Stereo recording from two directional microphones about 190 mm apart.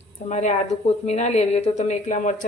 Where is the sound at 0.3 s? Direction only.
40° left (ahead or behind).